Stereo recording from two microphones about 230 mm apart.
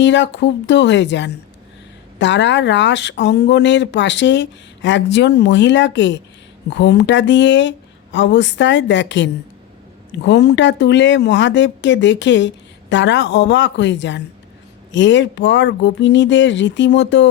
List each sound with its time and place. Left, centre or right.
0.0 s speech: left